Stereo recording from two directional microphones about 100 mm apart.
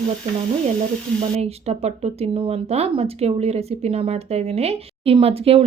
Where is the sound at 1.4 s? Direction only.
90° right.